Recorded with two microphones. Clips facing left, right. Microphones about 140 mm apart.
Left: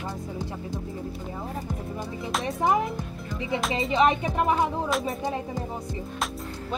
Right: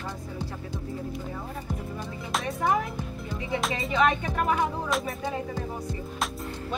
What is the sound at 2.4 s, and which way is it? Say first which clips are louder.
Music: left 2 dB; 20° left (ahead or behind).